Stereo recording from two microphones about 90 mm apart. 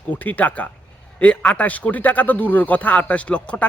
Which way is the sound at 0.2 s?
20° left (ahead or behind).